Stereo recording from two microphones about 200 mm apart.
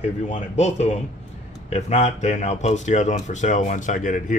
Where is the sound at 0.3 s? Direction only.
35° left (ahead or behind).